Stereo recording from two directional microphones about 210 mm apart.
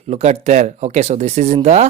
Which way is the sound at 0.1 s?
30° right (ahead or behind).